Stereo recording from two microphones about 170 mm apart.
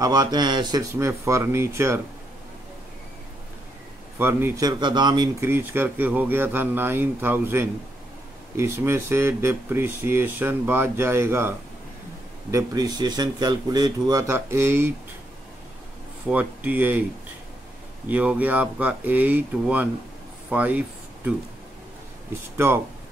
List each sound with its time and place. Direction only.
0.0 s speech: 25° right (ahead or behind)
4.2 s speech: 10° right (ahead or behind)
5.4 s speech: 15° right (ahead or behind)
16.3 s speech: 10° right (ahead or behind)
18.0 s speech: 10° right (ahead or behind)